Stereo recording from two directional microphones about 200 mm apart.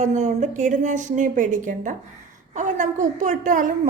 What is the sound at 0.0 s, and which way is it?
A woman's voice, 35° right (ahead or behind).